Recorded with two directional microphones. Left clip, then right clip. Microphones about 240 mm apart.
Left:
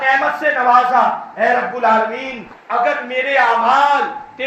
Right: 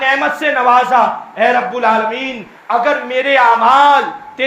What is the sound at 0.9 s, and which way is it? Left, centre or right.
A man's voice, right.